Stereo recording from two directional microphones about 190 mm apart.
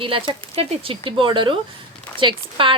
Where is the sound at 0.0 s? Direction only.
30° right (ahead or behind).